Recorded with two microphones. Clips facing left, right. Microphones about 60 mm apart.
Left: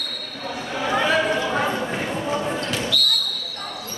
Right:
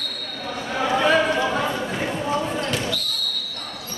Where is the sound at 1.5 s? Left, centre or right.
Centre.